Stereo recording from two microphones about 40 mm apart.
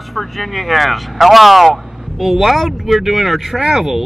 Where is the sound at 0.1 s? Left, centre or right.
Centre.